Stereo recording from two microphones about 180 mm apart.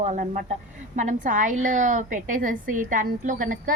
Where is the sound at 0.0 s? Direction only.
45° right (ahead or behind).